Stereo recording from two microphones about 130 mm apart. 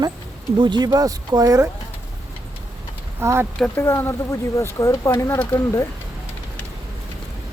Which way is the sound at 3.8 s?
20° left (ahead or behind).